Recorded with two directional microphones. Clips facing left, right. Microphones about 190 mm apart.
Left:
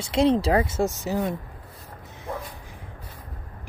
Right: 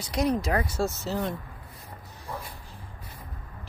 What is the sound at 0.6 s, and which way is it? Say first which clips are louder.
Speech: left 4 dB; 20° left (ahead or behind).